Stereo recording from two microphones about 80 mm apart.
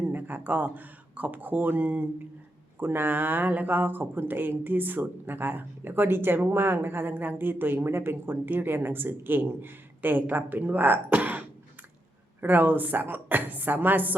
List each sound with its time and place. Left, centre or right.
0.0 s speech: right